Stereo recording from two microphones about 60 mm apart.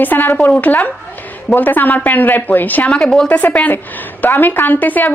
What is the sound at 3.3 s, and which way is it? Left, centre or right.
Speech, left.